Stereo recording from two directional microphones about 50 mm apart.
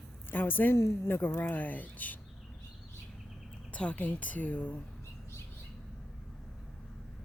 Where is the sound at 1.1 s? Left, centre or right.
Left.